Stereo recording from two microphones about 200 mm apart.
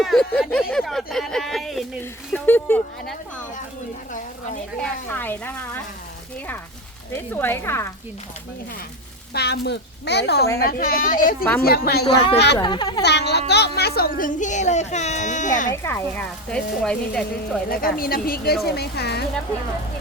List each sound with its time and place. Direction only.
0.0 s speech: centre (ahead or behind)
4.8 s speech: 10° left (ahead or behind)
7.3 s speech: 10° left (ahead or behind)
9.3 s a woman's voice: 55° left (ahead or behind)
12.5 s speech: 20° left (ahead or behind)
13.0 s a woman's voice: 55° left (ahead or behind); by 15.7 s 40° left (ahead or behind)
15.7 s speech: 10° left (ahead or behind)
17.7 s speech: 45° left (ahead or behind)